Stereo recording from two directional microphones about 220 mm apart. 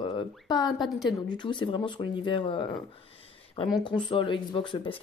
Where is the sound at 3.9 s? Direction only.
20° left (ahead or behind).